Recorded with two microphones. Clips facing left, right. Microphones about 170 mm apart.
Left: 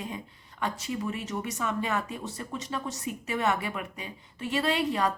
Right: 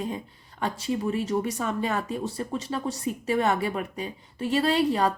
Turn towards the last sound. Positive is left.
turn(degrees=-35)  # may be behind; listen again after turning